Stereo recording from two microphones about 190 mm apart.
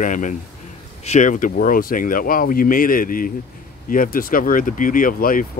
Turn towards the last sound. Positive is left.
turn(degrees=45)  # may be behind; listen again after turning